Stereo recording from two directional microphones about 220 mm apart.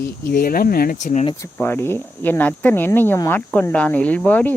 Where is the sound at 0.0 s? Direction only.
40° left (ahead or behind).